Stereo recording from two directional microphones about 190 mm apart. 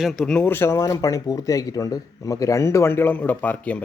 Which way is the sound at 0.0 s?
Centre (ahead or behind).